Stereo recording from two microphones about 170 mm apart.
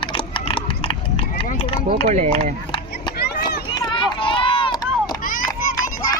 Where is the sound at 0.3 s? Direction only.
30° left (ahead or behind).